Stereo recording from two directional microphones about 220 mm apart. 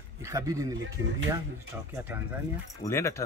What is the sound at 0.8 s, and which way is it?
Speech, 60° right (ahead or behind).